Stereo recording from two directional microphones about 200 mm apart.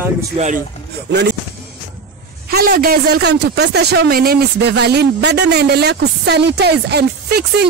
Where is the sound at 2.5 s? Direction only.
45° right (ahead or behind).